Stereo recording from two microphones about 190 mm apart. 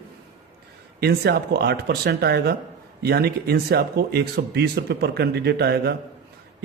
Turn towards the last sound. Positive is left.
turn(degrees=-60)  # may be behind; listen again after turning